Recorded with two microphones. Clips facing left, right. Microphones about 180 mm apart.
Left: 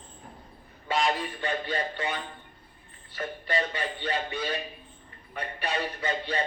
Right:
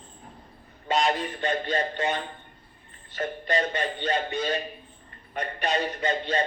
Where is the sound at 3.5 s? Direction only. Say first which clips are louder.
Right 3 dB; 45° right (ahead or behind).